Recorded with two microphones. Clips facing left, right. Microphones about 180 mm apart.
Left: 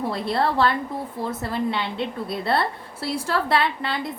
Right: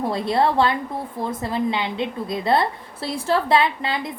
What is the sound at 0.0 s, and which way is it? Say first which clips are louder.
A woman's voice: right 3 dB; 15° right (ahead or behind).